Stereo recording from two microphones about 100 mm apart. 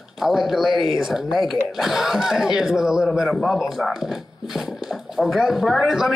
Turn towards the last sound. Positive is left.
turn(degrees=-5)  # may be behind; listen again after turning